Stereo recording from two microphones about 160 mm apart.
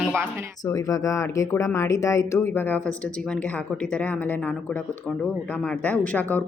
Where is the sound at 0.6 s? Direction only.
20° left (ahead or behind).